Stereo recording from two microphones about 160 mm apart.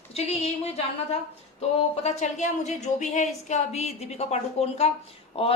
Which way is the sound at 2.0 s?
45° left (ahead or behind).